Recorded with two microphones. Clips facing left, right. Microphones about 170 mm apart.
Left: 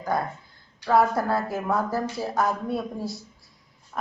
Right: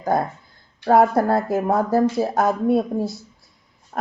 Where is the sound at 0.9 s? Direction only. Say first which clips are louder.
Right 5 dB; 50° right (ahead or behind).